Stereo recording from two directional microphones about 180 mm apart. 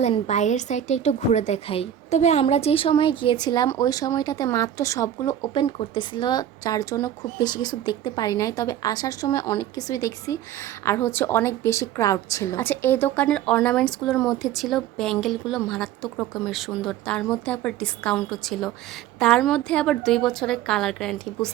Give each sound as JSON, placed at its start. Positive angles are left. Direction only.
{"t": 0.0, "sound": "a woman's voice", "side_deg": 40}